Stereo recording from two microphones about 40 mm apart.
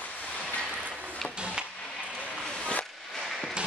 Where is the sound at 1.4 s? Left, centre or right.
Right.